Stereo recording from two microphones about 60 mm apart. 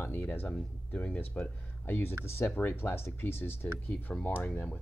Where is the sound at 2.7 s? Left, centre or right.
Left.